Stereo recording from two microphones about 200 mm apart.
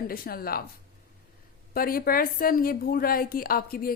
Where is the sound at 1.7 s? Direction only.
45° left (ahead or behind).